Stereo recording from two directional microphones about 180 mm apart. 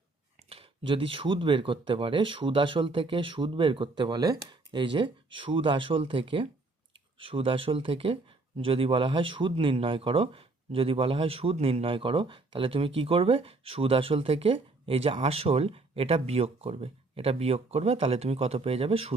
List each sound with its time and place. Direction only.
0.5 s speech: 30° right (ahead or behind)